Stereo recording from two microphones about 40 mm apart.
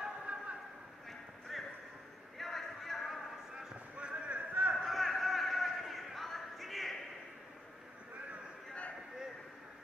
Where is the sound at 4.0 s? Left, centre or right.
Right.